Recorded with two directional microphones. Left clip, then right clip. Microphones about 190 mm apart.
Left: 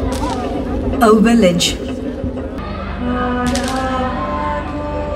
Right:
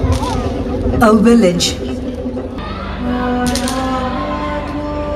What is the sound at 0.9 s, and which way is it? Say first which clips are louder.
Speech: right 1 dB; 30° right (ahead or behind).